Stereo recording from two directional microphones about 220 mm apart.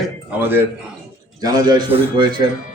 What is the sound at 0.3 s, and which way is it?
A man's voice, 10° right (ahead or behind).